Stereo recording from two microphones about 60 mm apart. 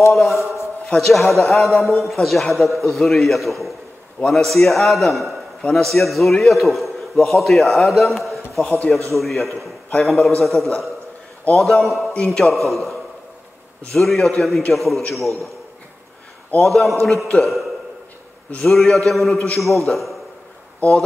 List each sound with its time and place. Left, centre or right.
0.1 s a man's voice: centre
0.4 s a sound: left
0.9 s a man's voice: centre
8.6 s a man's voice: centre
9.1 s a man's voice: centre
16.6 s a man's voice: centre